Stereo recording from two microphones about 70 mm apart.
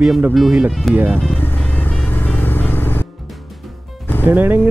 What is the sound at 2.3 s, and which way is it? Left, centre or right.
Vehicle, left.